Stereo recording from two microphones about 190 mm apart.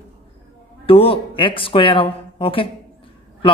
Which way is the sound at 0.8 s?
30° left (ahead or behind).